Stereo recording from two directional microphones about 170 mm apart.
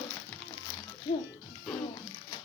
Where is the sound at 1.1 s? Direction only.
25° left (ahead or behind).